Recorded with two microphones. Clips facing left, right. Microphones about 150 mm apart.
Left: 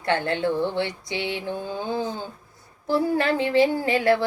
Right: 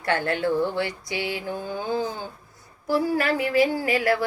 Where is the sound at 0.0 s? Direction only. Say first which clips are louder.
Left 1 dB; 20° left (ahead or behind).